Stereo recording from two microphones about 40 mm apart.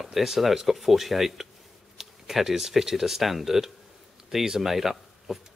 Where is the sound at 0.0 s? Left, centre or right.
Centre.